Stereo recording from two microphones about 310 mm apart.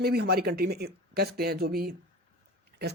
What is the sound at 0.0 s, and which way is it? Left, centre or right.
Speech, right.